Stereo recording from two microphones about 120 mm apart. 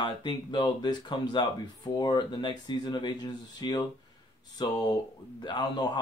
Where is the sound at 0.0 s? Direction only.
40° left (ahead or behind).